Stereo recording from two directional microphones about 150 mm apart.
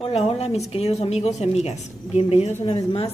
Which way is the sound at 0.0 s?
40° left (ahead or behind).